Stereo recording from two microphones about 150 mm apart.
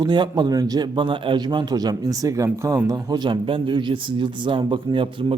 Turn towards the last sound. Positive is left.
turn(degrees=-35)  # may be behind; listen again after turning